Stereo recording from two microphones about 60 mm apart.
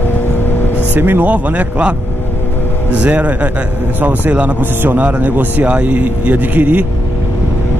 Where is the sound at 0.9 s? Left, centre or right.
Right.